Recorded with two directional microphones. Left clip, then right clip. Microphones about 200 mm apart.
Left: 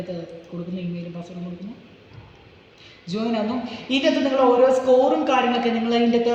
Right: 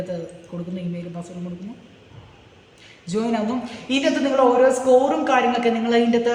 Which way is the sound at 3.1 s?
40° right (ahead or behind).